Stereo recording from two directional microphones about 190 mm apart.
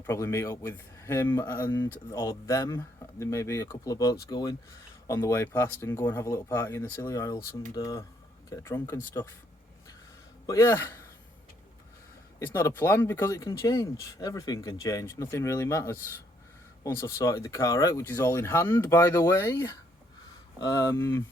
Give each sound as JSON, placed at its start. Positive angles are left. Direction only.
{"t": 0.0, "sound": "speech", "side_deg": 15}
{"t": 10.4, "sound": "speech", "side_deg": 15}
{"t": 12.4, "sound": "speech", "side_deg": 15}